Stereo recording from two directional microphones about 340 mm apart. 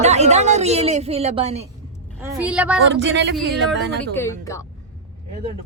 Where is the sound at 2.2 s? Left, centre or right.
Centre.